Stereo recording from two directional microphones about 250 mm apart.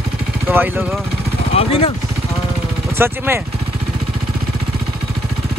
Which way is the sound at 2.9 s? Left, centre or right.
Centre.